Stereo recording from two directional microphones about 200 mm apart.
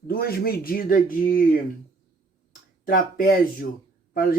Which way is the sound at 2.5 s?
45° left (ahead or behind).